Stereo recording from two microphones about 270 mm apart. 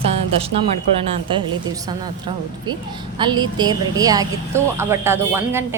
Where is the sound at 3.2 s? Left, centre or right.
Centre.